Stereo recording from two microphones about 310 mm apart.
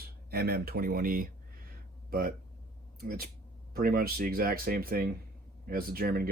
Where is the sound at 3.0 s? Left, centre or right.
Right.